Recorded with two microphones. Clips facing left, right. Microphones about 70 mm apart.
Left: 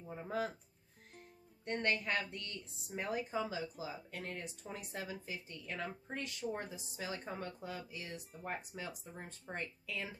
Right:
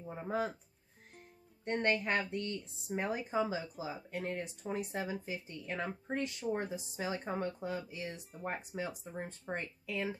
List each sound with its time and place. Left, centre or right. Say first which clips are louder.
0.1 s speech: right 3 dB; right
1.6 s speech: right 4 dB; right